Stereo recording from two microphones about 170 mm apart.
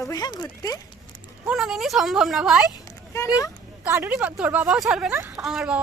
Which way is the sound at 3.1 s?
20° left (ahead or behind).